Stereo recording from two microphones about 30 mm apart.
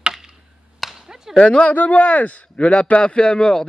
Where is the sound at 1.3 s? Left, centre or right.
Left.